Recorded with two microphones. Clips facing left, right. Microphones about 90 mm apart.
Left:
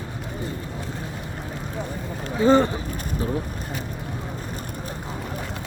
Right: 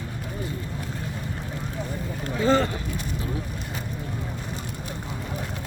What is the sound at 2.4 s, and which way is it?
Speech, 20° left (ahead or behind).